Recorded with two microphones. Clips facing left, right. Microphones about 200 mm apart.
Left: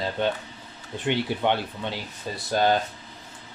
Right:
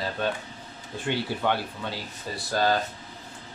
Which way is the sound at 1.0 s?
20° left (ahead or behind).